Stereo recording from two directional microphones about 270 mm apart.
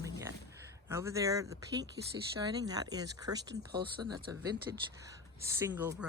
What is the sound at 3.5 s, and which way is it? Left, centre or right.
Speech, right.